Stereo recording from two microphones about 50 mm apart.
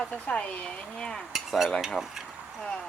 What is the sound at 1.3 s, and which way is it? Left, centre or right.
Cutlery, centre.